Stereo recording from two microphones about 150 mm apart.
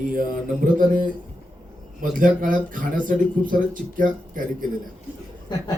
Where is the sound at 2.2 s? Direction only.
65° right (ahead or behind).